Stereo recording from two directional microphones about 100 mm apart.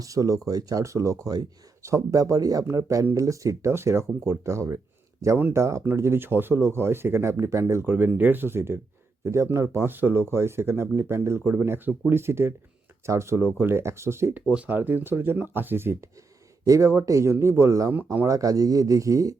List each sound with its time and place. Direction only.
0.0 s speech: 35° right (ahead or behind)
14.5 s speech: 15° right (ahead or behind); by 17.9 s 30° right (ahead or behind)
17.9 s speech: 20° right (ahead or behind)
18.3 s speech: 35° right (ahead or behind)